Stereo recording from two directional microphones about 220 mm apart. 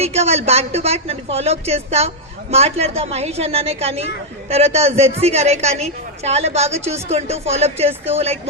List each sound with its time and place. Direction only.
0.0 s a woman's voice: 30° right (ahead or behind)